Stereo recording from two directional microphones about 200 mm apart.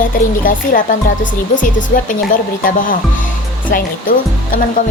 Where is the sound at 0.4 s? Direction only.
40° left (ahead or behind).